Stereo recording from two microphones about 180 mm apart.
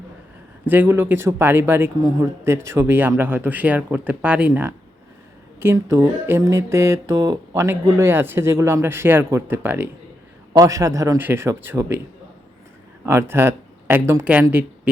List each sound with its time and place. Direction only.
0.6 s speech: 10° right (ahead or behind)
13.1 s speech: 15° right (ahead or behind)